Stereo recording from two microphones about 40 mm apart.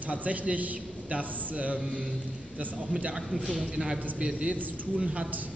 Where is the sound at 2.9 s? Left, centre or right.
Right.